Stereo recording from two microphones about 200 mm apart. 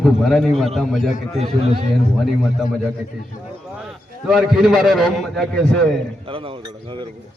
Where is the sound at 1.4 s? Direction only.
30° right (ahead or behind).